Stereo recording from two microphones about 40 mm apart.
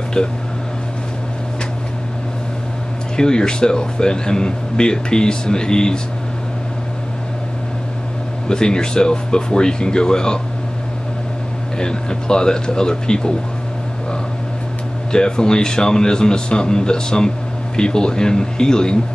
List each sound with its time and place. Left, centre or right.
3.2 s speech: left
8.5 s speech: centre
11.8 s speech: centre
15.1 s speech: centre